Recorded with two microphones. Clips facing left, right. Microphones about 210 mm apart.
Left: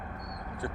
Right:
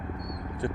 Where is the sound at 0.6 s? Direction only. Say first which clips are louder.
Right 6 dB; 15° right (ahead or behind).